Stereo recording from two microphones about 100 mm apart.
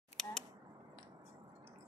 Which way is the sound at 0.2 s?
5° left (ahead or behind).